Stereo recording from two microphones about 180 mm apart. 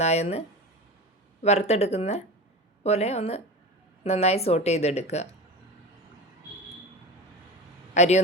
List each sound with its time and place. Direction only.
0.0 s speech: 35° left (ahead or behind)
7.9 s speech: 40° left (ahead or behind)